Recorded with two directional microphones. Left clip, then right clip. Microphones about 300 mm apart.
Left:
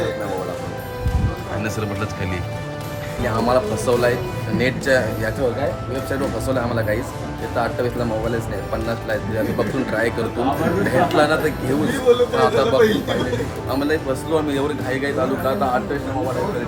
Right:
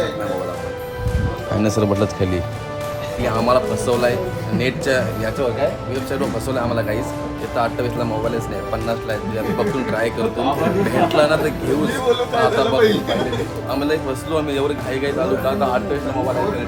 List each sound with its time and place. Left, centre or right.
3.2 s speech: centre
9.6 s speech: centre